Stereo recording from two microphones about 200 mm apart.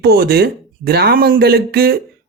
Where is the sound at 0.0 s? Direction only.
50° right (ahead or behind).